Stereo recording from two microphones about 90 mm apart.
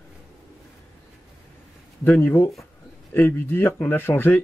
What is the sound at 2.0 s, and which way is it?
Speech, 20° left (ahead or behind).